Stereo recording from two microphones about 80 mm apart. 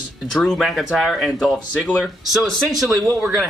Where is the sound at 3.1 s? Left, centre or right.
Right.